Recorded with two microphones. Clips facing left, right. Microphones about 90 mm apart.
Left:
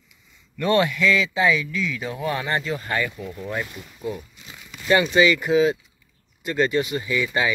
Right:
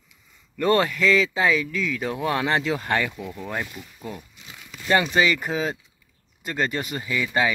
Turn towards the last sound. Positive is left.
turn(degrees=-50)  # may be behind; listen again after turning